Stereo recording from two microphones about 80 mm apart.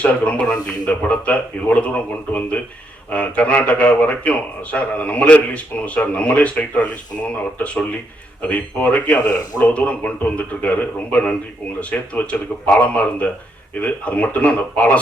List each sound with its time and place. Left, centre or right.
0.0 s a man's voice: centre
8.4 s a man's voice: centre